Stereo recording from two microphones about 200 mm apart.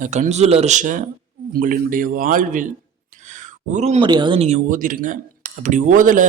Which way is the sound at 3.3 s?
40° right (ahead or behind).